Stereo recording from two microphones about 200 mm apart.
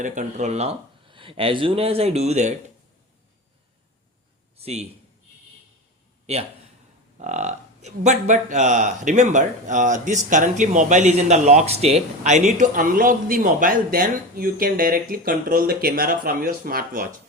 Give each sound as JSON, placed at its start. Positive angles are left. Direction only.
{"t": 0.0, "sound": "speech", "side_deg": -40}
{"t": 4.5, "sound": "a man's voice", "side_deg": -30}
{"t": 7.2, "sound": "speech", "side_deg": -35}